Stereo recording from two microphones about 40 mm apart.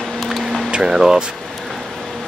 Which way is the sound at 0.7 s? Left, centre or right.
Centre.